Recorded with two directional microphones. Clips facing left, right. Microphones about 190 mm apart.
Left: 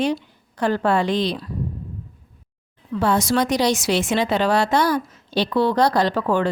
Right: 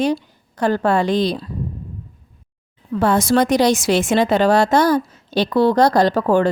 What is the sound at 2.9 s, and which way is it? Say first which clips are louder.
A woman's voice: right 4 dB; 50° right (ahead or behind).